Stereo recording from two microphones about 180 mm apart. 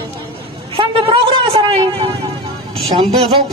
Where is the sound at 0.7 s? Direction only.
30° right (ahead or behind).